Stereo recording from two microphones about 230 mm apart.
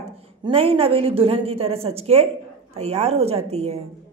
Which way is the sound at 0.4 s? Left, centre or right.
Right.